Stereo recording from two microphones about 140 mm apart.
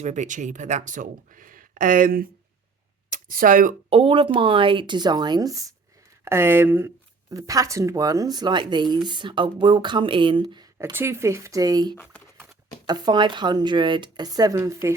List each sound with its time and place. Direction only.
0.0 s speech: 60° right (ahead or behind); by 2.3 s 90° right
3.1 s speech: 75° right (ahead or behind)
3.8 s speech: 40° right (ahead or behind)
10.8 s speech: 20° right (ahead or behind)